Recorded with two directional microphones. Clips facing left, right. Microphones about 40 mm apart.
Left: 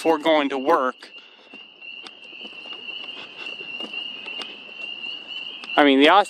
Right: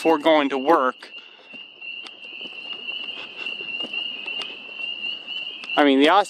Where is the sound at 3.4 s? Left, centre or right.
Centre.